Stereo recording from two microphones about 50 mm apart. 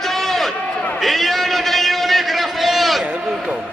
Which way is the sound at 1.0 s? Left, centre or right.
Centre.